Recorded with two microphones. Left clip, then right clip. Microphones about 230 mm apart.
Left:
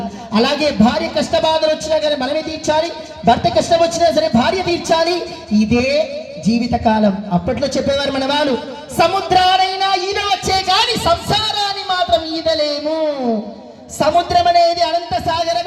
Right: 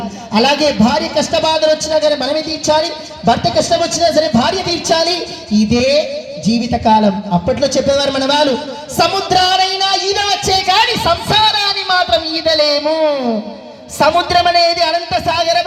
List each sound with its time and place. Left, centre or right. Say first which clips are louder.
0.3 s a man's voice: right 3 dB; right; by 15.6 s centre